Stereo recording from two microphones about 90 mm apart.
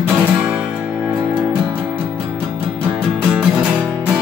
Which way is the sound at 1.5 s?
20° right (ahead or behind).